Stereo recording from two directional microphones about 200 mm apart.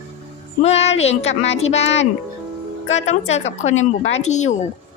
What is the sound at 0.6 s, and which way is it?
A woman's voice, 30° left (ahead or behind).